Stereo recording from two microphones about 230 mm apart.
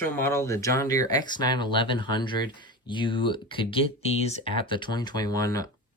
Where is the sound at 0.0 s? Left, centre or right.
Centre.